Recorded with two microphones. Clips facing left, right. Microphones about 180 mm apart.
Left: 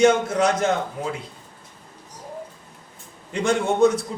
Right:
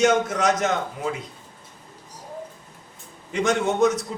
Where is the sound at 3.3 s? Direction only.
30° left (ahead or behind).